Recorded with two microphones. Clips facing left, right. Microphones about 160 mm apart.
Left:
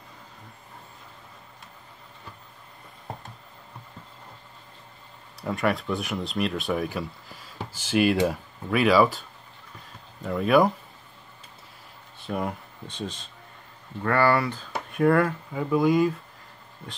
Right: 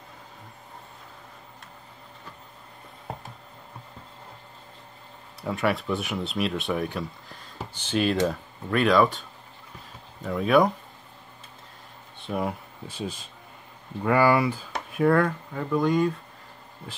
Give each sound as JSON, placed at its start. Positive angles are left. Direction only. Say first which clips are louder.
{"t": 5.4, "sound": "speech", "louder": "even", "side_deg": 0}
{"t": 10.2, "sound": "speech", "louder": "even", "side_deg": 0}
{"t": 12.2, "sound": "speech", "louder": "right 1 dB", "side_deg": 0}
{"t": 14.7, "sound": "speech", "louder": "left 2 dB", "side_deg": 0}